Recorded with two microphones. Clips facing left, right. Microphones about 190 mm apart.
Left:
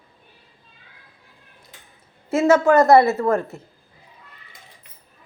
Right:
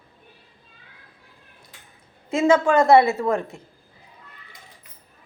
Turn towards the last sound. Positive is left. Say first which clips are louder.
# left 3 dB
turn(degrees=0)  # may be behind; listen again after turning